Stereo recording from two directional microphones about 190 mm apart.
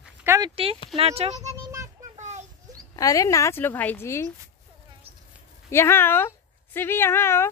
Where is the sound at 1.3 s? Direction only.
15° right (ahead or behind).